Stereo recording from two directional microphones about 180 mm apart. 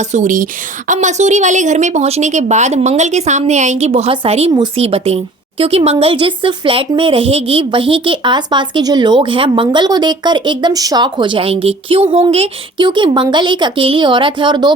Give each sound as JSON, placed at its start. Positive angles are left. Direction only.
{"t": 0.1, "sound": "a woman's voice", "side_deg": -45}